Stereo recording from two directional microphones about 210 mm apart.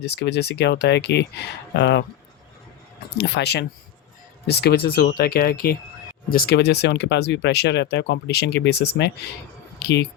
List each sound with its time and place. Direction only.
0.0 s speech: 50° left (ahead or behind)
3.2 s speech: 50° left (ahead or behind)